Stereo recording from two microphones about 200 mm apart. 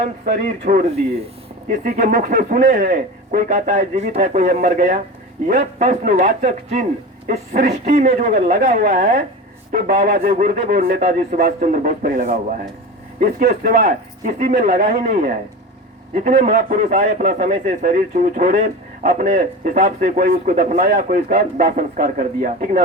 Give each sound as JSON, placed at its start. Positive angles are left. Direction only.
{"t": 0.0, "sound": "a man's voice", "side_deg": -45}